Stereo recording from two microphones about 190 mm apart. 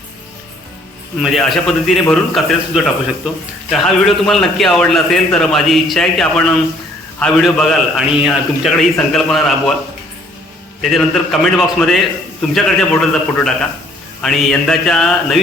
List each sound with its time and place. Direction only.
1.2 s a man's voice: centre (ahead or behind)
10.8 s a man's voice: centre (ahead or behind)